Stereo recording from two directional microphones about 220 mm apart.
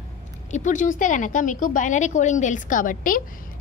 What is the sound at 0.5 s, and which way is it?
A woman's voice, 35° left (ahead or behind).